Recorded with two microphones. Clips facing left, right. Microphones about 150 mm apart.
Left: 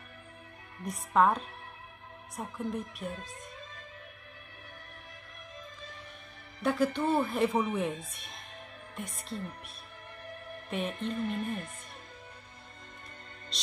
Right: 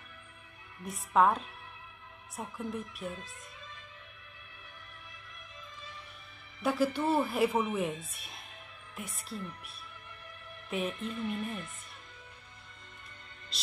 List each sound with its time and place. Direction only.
0.8 s speech: centre (ahead or behind)
6.6 s speech: 5° right (ahead or behind)
9.1 s music: 35° left (ahead or behind)
10.9 s music: 35° left (ahead or behind)
13.5 s music: 5° right (ahead or behind)